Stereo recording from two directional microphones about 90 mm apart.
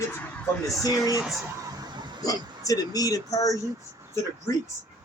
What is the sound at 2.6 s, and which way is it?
Speech, 40° left (ahead or behind).